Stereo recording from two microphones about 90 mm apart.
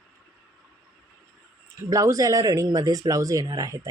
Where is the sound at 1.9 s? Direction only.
40° right (ahead or behind).